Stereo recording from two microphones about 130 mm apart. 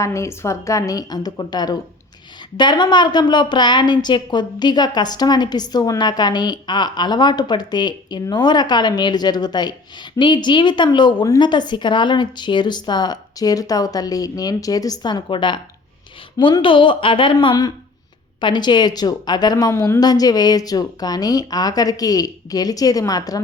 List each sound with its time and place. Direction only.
0.0 s a woman's voice: 20° left (ahead or behind)